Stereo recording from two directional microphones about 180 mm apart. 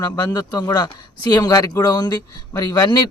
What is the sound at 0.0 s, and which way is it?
Speech, 20° left (ahead or behind).